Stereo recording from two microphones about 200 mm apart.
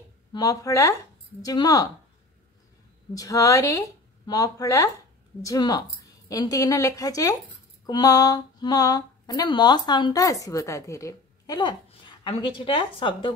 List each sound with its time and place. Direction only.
0.3 s speech: 15° left (ahead or behind)
3.2 s speech: 15° left (ahead or behind)